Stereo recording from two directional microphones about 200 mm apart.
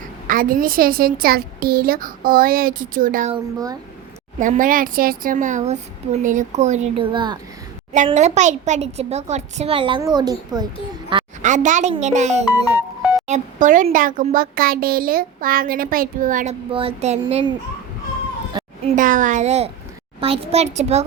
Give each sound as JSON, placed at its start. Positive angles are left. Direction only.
{"t": 0.3, "sound": "a child's voice", "side_deg": -45}
{"t": 3.3, "sound": "speech", "side_deg": -20}
{"t": 4.4, "sound": "speech", "side_deg": -40}
{"t": 8.0, "sound": "speech", "side_deg": -35}
{"t": 11.1, "sound": "a sound", "side_deg": -25}
{"t": 11.4, "sound": "speech", "side_deg": -40}
{"t": 12.6, "sound": "music", "side_deg": -10}
{"t": 13.2, "sound": "a child's voice", "side_deg": -35}
{"t": 18.5, "sound": "a sound", "side_deg": -25}
{"t": 18.9, "sound": "speech", "side_deg": -40}